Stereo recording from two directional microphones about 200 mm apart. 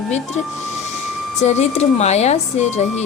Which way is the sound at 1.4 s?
35° left (ahead or behind).